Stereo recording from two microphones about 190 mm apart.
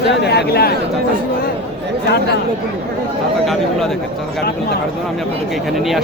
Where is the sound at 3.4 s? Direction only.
Centre (ahead or behind).